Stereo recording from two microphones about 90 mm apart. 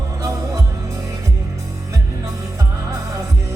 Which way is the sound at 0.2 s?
35° right (ahead or behind).